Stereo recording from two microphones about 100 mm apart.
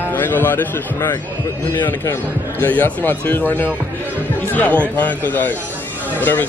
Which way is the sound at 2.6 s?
20° left (ahead or behind).